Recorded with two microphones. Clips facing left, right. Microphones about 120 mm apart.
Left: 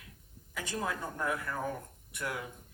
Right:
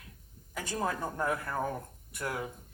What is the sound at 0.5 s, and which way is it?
Speech, 40° right (ahead or behind).